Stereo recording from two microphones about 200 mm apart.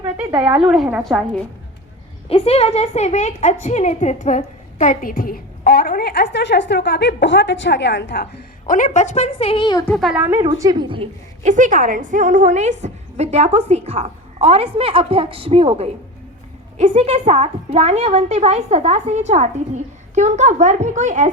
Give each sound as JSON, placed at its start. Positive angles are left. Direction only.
{"t": 0.0, "sound": "a woman's voice", "side_deg": -10}
{"t": 2.3, "sound": "a woman's voice", "side_deg": 30}
{"t": 9.8, "sound": "a woman's voice", "side_deg": 0}
{"t": 10.4, "sound": "a woman's voice", "side_deg": -20}
{"t": 11.4, "sound": "a woman's voice", "side_deg": -40}